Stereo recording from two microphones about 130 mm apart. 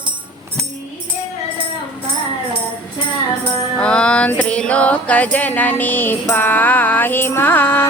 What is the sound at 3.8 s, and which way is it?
Music, 10° left (ahead or behind).